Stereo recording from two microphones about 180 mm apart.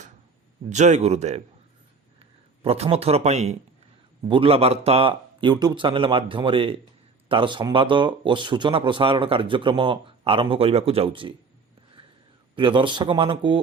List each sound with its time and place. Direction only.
0.7 s speech: 40° right (ahead or behind)
2.6 s speech: 35° right (ahead or behind)
12.0 s a sound: 30° right (ahead or behind)
12.5 s speech: 25° right (ahead or behind)